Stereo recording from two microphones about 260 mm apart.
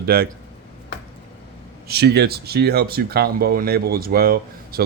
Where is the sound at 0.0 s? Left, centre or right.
Right.